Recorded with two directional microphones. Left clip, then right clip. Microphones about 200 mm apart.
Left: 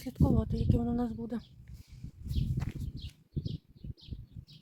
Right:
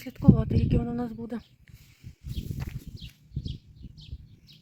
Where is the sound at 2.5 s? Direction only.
Centre (ahead or behind).